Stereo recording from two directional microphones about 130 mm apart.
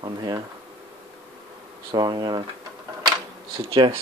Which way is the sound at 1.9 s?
30° right (ahead or behind).